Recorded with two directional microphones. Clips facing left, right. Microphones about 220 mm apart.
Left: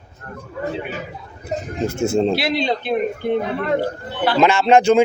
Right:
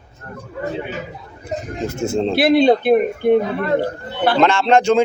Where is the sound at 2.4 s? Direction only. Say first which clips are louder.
Right 8 dB; 55° right (ahead or behind).